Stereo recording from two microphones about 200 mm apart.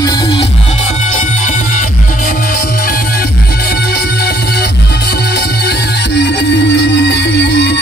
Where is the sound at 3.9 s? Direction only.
55° left (ahead or behind).